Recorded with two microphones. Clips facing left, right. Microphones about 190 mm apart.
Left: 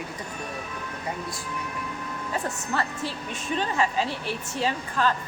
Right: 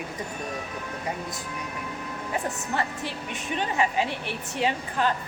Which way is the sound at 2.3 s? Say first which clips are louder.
Even; 15° right (ahead or behind).